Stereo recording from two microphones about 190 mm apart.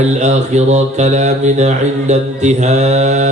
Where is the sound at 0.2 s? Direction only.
35° right (ahead or behind).